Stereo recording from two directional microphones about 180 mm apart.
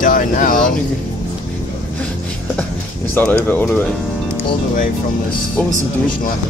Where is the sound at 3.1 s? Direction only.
10° left (ahead or behind).